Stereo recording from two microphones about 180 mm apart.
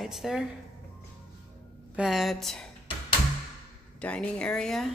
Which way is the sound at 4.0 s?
5° left (ahead or behind).